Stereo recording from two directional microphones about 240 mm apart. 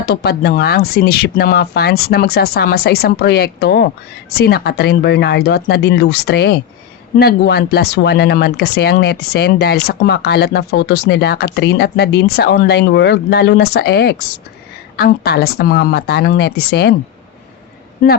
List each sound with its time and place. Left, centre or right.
0.0 s speech: left